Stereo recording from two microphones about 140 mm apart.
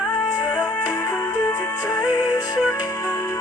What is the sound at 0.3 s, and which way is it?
Music, 30° left (ahead or behind).